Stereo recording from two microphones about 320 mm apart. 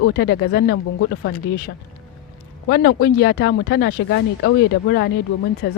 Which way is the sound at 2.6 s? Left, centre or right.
Left.